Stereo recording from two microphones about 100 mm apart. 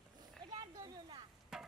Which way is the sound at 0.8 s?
45° right (ahead or behind).